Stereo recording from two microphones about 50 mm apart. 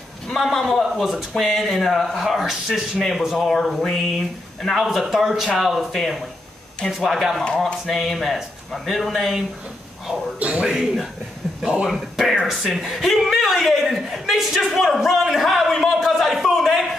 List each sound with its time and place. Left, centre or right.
0.3 s a man's voice: centre
4.8 s a man's voice: centre
10.4 s a man's voice: right
10.7 s speech: centre
12.3 s a man's voice: centre
15.0 s a man's voice: centre
16.2 s a sound: centre